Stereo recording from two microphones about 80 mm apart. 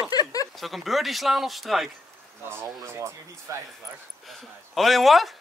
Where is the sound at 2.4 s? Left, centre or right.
Right.